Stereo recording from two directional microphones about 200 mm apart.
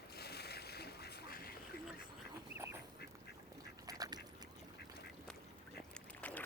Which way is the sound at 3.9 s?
20° right (ahead or behind).